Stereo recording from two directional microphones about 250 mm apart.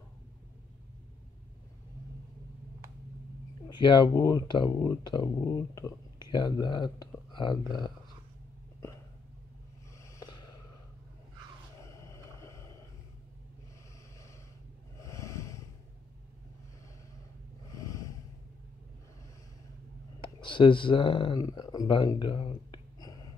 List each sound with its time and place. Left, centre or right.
3.6 s speech: centre
10.0 s snort: centre
11.8 s vehicle: centre
15.0 s snort: centre
17.7 s snort: centre
20.2 s speech: centre